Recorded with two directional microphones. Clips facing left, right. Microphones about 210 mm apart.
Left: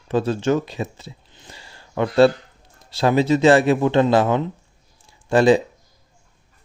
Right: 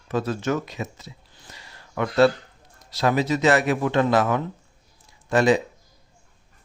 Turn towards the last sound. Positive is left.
turn(degrees=30)  # may be behind; listen again after turning